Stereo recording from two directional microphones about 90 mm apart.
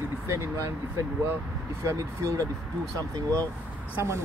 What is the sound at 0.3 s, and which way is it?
Speech, 30° right (ahead or behind).